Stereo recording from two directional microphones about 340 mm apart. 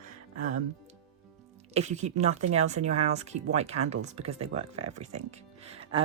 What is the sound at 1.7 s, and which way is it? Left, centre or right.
Speech, centre.